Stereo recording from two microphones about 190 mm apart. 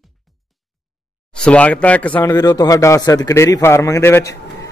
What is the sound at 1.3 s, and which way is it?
Speech, 5° left (ahead or behind).